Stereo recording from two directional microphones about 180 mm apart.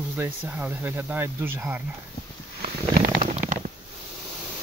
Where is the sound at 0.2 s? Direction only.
10° right (ahead or behind).